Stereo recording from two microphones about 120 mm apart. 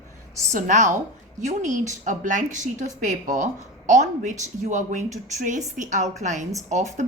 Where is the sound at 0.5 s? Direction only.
90° right.